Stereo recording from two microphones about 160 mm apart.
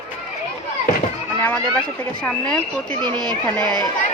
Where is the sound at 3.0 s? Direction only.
25° right (ahead or behind).